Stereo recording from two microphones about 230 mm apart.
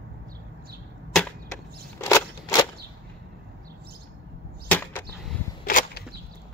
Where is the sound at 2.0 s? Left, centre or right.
Centre.